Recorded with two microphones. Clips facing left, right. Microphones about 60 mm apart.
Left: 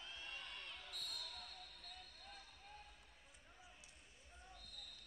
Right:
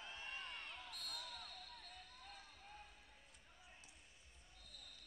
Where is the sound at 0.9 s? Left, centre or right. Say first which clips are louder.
Even; right.